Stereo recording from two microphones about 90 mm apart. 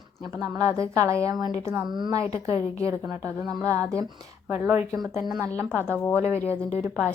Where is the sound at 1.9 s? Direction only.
55° right (ahead or behind).